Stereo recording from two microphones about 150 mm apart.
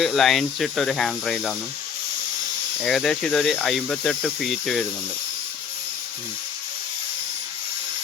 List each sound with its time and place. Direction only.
0.0 s speech: centre (ahead or behind)
2.8 s speech: 5° left (ahead or behind)